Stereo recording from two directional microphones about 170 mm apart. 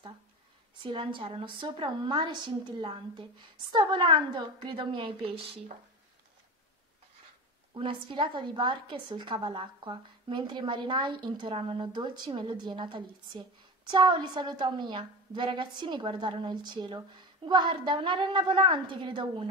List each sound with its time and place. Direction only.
0.8 s a woman's voice: 30° right (ahead or behind)
7.7 s a woman's voice: 30° right (ahead or behind)